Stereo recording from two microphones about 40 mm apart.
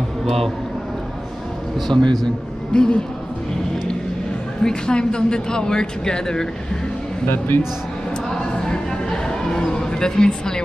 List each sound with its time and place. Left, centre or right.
1.9 s a man's voice: centre
4.6 s speech: left
7.2 s a man's voice: left
8.3 s a sound: centre